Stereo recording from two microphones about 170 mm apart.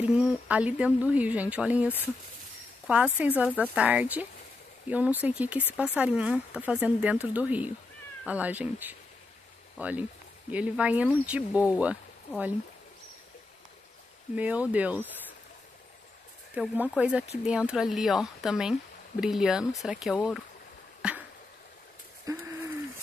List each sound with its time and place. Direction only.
0.0 s speech: 5° right (ahead or behind)
2.9 s speech: 10° right (ahead or behind)
14.3 s speech: 10° right (ahead or behind)
16.5 s speech: 10° right (ahead or behind)
21.0 s a sound: 5° right (ahead or behind)
22.2 s a sound: 20° right (ahead or behind)